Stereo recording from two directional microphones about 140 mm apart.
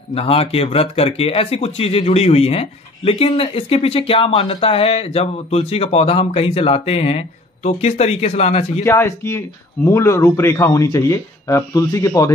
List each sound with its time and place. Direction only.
0.1 s speech: 45° left (ahead or behind)
8.8 s speech: 20° left (ahead or behind)